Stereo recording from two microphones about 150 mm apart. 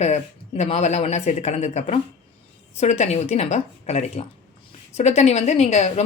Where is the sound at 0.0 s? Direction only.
45° left (ahead or behind).